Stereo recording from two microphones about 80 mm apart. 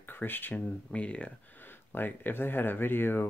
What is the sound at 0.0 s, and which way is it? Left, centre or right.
Speech, left.